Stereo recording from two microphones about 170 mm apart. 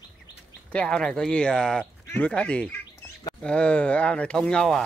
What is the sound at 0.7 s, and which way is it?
Speech, 5° left (ahead or behind).